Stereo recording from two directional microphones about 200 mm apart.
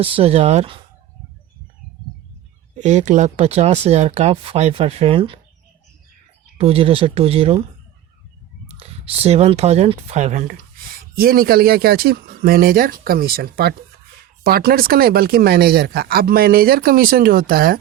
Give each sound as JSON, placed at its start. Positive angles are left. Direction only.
{"t": 0.0, "sound": "speech", "side_deg": -30}
{"t": 2.7, "sound": "speech", "side_deg": -35}
{"t": 6.6, "sound": "speech", "side_deg": -30}
{"t": 8.6, "sound": "speech", "side_deg": -30}